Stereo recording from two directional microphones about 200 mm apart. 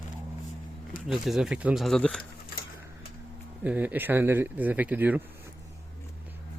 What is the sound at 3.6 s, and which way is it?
Speech, 10° right (ahead or behind).